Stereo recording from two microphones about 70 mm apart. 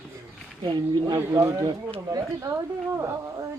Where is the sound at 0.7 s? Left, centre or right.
Right.